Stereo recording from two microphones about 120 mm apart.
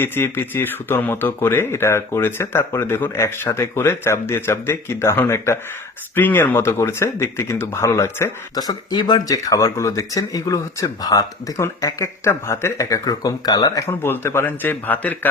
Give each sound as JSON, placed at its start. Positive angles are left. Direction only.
{"t": 0.0, "sound": "speech", "side_deg": 20}